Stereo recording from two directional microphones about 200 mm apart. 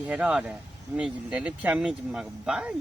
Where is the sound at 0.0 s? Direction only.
5° right (ahead or behind).